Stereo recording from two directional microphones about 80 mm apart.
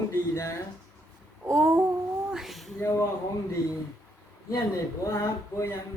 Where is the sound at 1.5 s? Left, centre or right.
Centre.